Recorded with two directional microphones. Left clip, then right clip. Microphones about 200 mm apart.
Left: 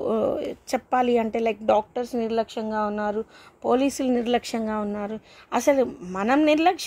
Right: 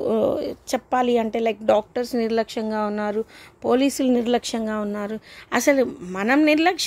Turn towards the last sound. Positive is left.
turn(degrees=-15)  # may be behind; listen again after turning